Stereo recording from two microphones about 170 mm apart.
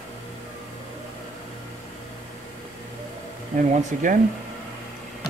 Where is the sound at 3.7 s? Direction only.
50° right (ahead or behind).